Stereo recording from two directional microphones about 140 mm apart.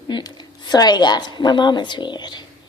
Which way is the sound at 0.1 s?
30° left (ahead or behind).